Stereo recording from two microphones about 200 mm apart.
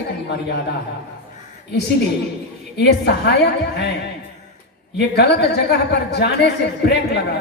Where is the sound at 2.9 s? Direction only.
55° left (ahead or behind).